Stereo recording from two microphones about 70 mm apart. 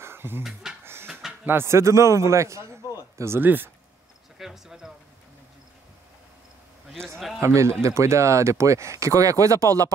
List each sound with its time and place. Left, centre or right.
0.0 s a sound: right
0.4 s speech: centre
1.4 s speech: right
3.4 s speech: right
4.4 s a sound: centre
7.0 s a man's voice: right